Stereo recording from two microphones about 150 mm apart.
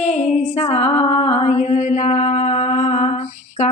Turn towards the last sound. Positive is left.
turn(degrees=50)  # may be behind; listen again after turning